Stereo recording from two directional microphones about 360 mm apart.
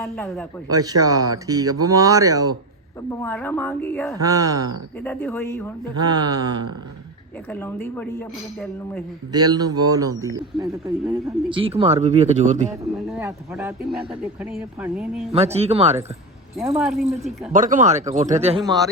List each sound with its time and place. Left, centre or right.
0.0 s a man's voice: centre
0.7 s a man's voice: centre
3.1 s a woman's voice: centre
4.2 s a man's voice: centre
4.9 s a woman's voice: centre
7.5 s a woman's voice: centre
9.3 s a man's voice: centre
13.1 s a woman's voice: centre
15.3 s a man's voice: centre
16.6 s a woman's voice: centre
17.5 s speech: right